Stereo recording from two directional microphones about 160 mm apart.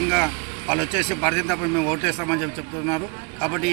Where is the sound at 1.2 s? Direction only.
5° right (ahead or behind).